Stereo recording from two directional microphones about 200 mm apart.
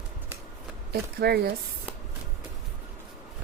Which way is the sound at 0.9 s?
50° right (ahead or behind).